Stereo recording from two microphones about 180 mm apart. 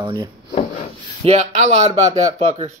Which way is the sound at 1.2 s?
35° right (ahead or behind).